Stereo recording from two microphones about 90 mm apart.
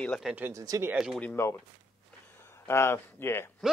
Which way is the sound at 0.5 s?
40° right (ahead or behind).